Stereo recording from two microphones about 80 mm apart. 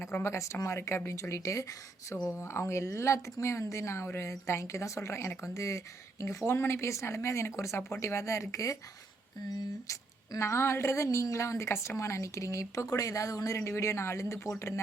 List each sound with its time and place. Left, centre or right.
0.0 s speech: left
9.8 s speech: left